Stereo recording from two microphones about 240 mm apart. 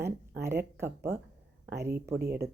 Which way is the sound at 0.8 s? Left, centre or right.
Centre.